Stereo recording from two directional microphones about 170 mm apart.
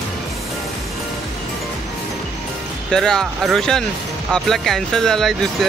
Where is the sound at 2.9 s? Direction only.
5° left (ahead or behind).